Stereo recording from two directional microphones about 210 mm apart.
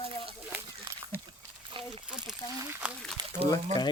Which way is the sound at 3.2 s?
20° right (ahead or behind).